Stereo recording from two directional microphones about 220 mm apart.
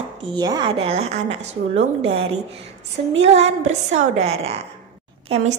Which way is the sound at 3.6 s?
30° right (ahead or behind).